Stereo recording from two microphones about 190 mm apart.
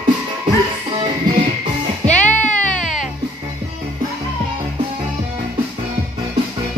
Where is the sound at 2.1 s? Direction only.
10° left (ahead or behind).